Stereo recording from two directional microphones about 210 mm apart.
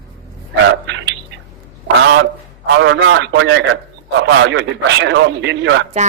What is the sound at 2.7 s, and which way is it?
A man's voice, 60° right (ahead or behind).